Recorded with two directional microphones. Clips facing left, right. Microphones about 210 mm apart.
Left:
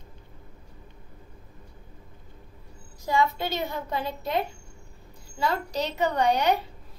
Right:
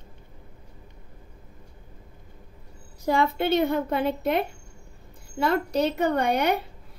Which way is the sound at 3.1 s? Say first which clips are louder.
Right 3 dB; 55° right (ahead or behind).